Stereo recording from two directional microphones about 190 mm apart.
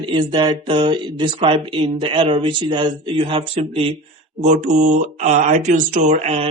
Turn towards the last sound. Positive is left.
turn(degrees=-35)  # may be behind; listen again after turning